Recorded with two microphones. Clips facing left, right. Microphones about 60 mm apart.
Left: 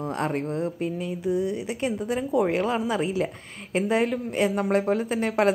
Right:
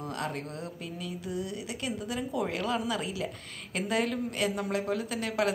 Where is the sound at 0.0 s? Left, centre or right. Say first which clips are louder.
Left 8 dB; left.